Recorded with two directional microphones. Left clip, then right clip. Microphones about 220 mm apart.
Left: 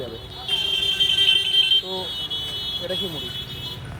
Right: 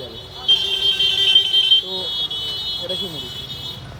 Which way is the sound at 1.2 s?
40° right (ahead or behind).